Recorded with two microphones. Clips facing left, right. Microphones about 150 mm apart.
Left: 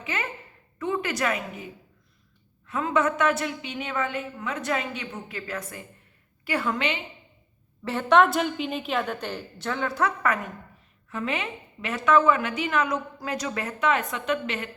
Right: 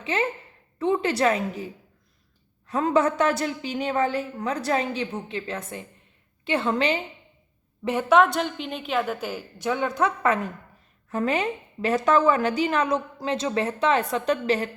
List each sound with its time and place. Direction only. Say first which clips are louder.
0.0 s a woman's voice: right 6 dB; 30° right (ahead or behind)
8.1 s a woman's voice: even; centre (ahead or behind); by 10.4 s 25° right (ahead or behind)
11.1 s a woman's voice: right 6 dB; 40° right (ahead or behind)